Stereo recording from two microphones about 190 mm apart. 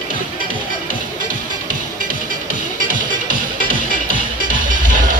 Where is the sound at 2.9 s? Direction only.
45° right (ahead or behind).